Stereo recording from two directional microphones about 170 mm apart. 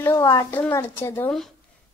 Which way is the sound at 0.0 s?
20° left (ahead or behind).